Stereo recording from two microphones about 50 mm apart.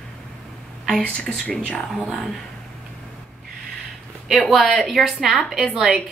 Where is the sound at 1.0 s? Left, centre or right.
Left; by 2.3 s centre.